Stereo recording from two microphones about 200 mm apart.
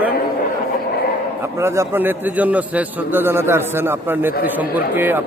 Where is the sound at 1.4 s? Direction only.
15° right (ahead or behind).